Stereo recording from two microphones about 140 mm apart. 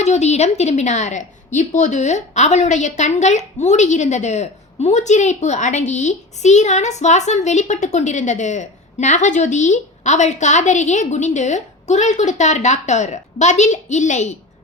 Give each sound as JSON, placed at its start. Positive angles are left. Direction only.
{"t": 0.0, "sound": "a woman's voice", "side_deg": 55}